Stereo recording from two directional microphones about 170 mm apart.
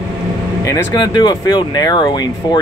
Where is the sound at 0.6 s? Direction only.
20° left (ahead or behind).